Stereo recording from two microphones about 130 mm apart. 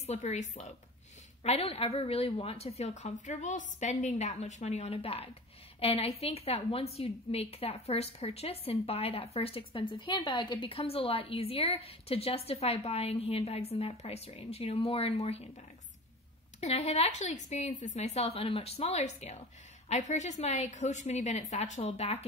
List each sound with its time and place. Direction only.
0.0 s speech: 60° left (ahead or behind)
1.4 s a woman's voice: 50° left (ahead or behind)
16.5 s speech: 55° left (ahead or behind)